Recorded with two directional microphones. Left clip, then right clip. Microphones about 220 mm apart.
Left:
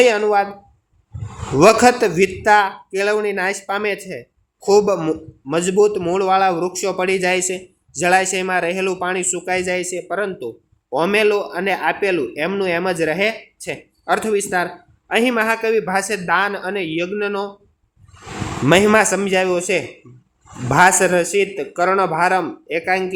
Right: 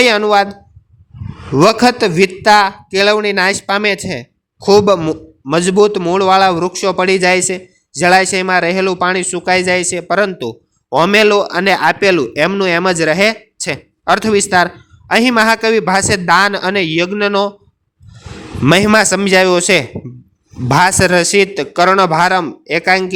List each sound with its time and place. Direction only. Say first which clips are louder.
0.1 s a man's voice: right 5 dB; 45° right (ahead or behind)
1.5 s a man's voice: right 1 dB; 50° right (ahead or behind)
18.6 s a man's voice: right 3 dB; 50° right (ahead or behind)